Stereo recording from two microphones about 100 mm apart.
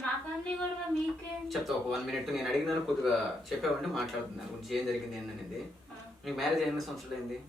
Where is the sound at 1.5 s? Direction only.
Centre (ahead or behind).